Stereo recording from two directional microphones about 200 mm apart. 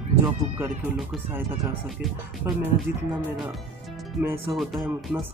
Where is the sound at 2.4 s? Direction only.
15° right (ahead or behind).